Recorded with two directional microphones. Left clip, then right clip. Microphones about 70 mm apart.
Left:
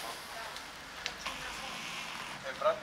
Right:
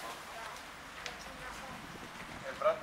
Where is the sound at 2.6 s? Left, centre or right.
Right.